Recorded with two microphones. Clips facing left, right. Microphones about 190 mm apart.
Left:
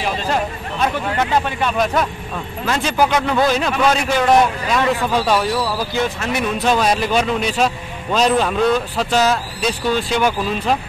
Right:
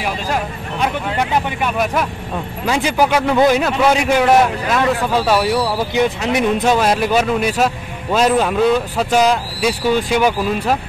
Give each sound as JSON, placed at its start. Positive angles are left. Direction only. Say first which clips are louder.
{"t": 0.0, "sound": "a man's voice", "louder": "left 1 dB", "side_deg": -10}
{"t": 5.8, "sound": "a man's voice", "louder": "right 4 dB", "side_deg": -15}
{"t": 6.6, "sound": "a man's voice", "louder": "right 2 dB", "side_deg": -5}